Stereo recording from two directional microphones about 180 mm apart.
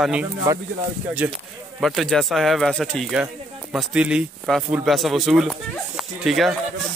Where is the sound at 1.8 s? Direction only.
Centre (ahead or behind).